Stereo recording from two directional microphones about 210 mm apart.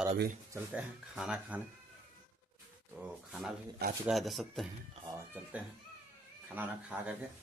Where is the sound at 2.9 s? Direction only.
5° right (ahead or behind).